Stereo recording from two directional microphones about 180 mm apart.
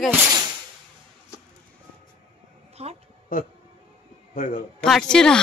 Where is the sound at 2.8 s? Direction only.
35° right (ahead or behind).